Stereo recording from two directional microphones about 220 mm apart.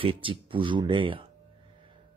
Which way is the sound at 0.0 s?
25° right (ahead or behind).